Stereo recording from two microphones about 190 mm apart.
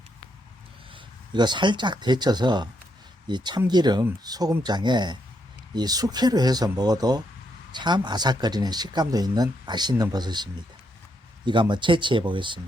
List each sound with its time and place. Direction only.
0.9 s speech: 25° right (ahead or behind)